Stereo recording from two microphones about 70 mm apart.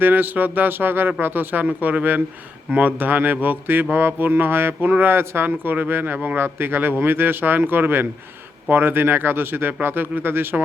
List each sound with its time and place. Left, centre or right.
0.0 s speech: right